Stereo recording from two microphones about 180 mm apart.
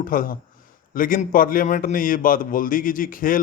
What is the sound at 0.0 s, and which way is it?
A man's voice, 50° left (ahead or behind).